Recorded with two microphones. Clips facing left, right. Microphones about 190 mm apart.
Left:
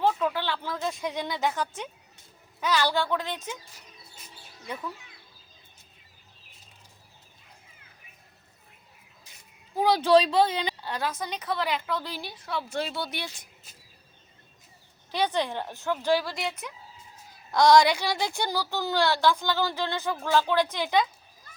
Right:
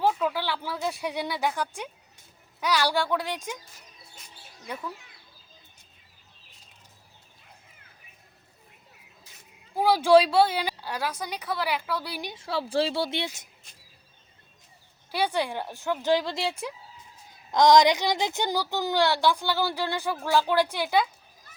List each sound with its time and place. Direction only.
0.0 s a woman's voice: 10° right (ahead or behind)
9.7 s a woman's voice: 10° right (ahead or behind)
15.1 s a woman's voice: 10° right (ahead or behind); by 16.7 s 30° right (ahead or behind)
17.5 s a woman's voice: 20° right (ahead or behind)